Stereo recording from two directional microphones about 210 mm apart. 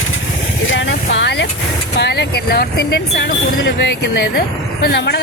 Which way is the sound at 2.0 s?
50° left (ahead or behind).